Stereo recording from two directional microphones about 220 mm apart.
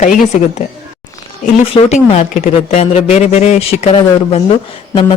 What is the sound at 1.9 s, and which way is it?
Speech, 30° left (ahead or behind).